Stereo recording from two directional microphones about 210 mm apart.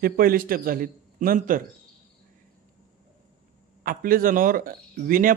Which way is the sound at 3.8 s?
40° right (ahead or behind).